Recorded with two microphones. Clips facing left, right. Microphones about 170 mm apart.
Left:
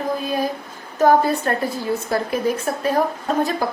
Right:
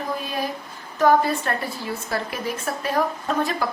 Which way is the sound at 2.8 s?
40° left (ahead or behind).